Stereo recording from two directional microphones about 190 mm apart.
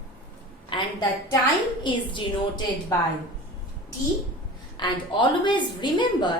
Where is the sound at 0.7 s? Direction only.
25° left (ahead or behind).